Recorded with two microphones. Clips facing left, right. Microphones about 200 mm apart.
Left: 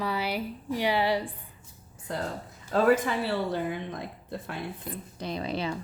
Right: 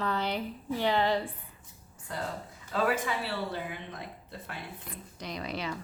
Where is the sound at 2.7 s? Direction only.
50° left (ahead or behind).